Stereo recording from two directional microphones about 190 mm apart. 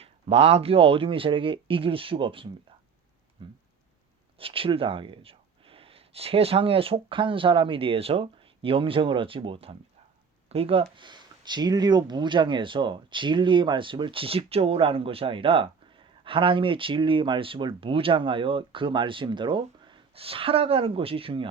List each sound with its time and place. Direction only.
0.0 s speech: 30° right (ahead or behind)
3.4 s a sound: 25° right (ahead or behind)
4.4 s speech: 30° right (ahead or behind)